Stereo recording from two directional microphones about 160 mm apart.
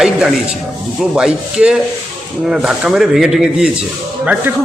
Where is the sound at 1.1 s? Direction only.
5° right (ahead or behind).